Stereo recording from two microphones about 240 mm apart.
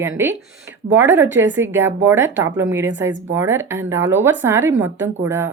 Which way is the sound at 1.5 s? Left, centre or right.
Centre.